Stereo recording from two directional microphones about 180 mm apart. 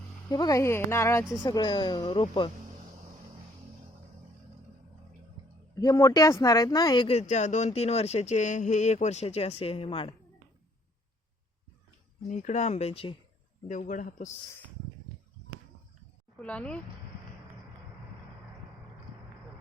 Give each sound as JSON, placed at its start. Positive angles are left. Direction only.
{"t": 0.3, "sound": "speech", "side_deg": 20}
{"t": 5.8, "sound": "speech", "side_deg": 20}
{"t": 12.3, "sound": "speech", "side_deg": 40}
{"t": 13.7, "sound": "speech", "side_deg": 45}
{"t": 16.4, "sound": "speech", "side_deg": 5}